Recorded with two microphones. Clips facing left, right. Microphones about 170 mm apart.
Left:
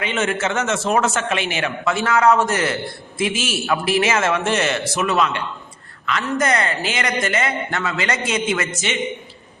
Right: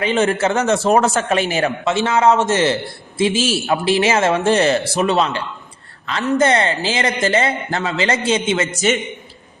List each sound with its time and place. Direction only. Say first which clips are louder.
0.0 s a man's voice: right 5 dB; 35° right (ahead or behind)